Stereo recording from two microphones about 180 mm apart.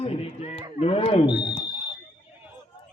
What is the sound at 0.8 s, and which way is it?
Speech, 35° left (ahead or behind).